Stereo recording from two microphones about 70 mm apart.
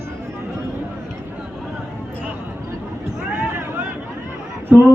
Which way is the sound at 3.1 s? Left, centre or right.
Centre.